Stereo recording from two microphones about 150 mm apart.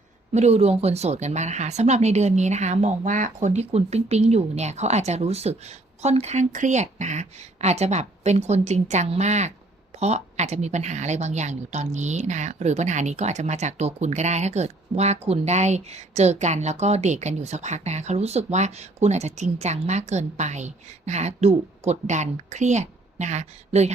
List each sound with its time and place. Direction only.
0.3 s speech: 45° right (ahead or behind)